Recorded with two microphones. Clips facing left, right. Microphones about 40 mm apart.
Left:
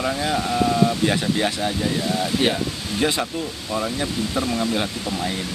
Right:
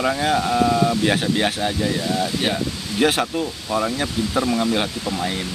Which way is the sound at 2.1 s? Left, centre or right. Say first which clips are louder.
Left 1 dB; centre.